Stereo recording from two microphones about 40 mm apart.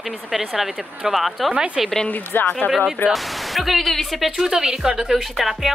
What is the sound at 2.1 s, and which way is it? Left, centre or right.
Speech, left.